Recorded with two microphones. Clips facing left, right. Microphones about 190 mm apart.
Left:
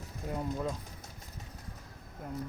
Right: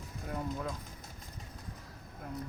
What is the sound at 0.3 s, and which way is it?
Speech, 25° left (ahead or behind).